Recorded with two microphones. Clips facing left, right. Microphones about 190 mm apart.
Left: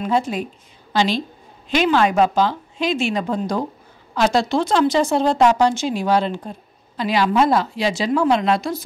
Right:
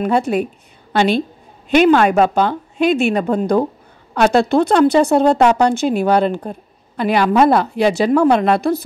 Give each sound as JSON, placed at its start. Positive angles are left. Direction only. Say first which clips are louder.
{"t": 0.0, "sound": "speech", "louder": "right 5 dB", "side_deg": -65}